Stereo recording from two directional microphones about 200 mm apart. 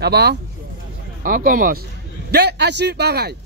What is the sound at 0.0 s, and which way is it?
Speech, 55° right (ahead or behind).